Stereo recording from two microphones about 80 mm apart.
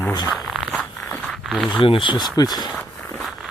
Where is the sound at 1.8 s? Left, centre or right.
Left.